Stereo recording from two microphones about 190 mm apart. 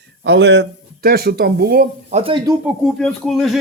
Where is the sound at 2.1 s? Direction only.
30° right (ahead or behind).